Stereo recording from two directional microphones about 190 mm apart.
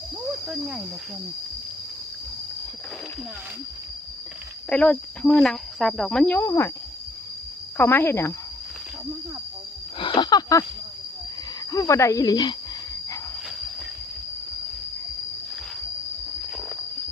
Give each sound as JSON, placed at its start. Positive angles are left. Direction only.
{"t": 0.3, "sound": "cricket", "side_deg": -5}
{"t": 4.7, "sound": "speech", "side_deg": 5}
{"t": 7.8, "sound": "speech", "side_deg": 10}
{"t": 10.0, "sound": "a sound", "side_deg": 25}
{"t": 11.7, "sound": "speech", "side_deg": 15}